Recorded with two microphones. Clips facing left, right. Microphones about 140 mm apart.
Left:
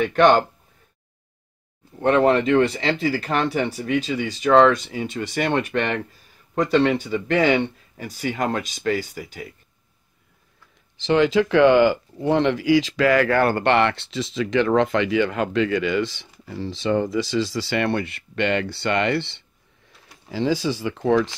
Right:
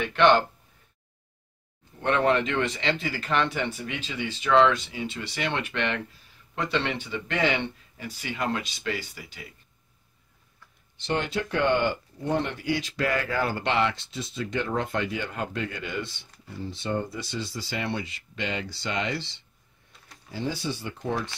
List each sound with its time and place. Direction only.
0.0 s speech: 45° left (ahead or behind)
2.0 s speech: 35° left (ahead or behind)
11.0 s speech: 90° left; by 19.4 s 60° left (ahead or behind)
20.2 s speech: 90° left